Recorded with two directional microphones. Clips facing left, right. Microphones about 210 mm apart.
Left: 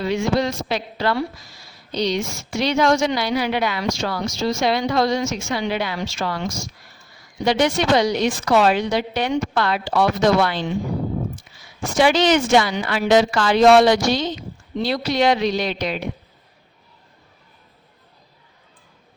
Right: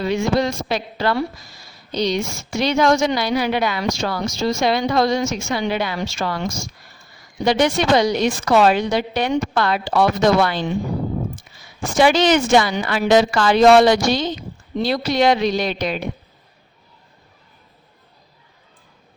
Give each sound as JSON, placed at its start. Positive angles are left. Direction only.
{"t": 0.0, "sound": "a woman's voice", "side_deg": -45}
{"t": 11.9, "sound": "a woman's voice", "side_deg": -45}